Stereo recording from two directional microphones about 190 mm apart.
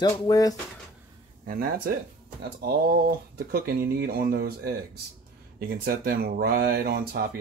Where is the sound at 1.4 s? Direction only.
50° right (ahead or behind).